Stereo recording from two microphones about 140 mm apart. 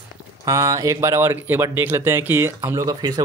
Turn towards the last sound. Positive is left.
turn(degrees=-25)  # may be behind; listen again after turning